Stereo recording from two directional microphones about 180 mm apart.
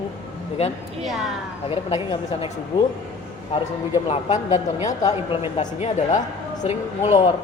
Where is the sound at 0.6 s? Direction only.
35° left (ahead or behind).